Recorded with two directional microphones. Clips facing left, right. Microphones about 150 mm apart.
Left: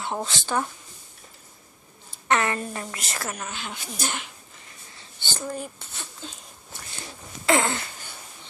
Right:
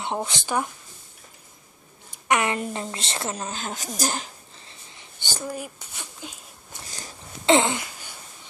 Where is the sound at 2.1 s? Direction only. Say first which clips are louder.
Right 1 dB; 15° right (ahead or behind).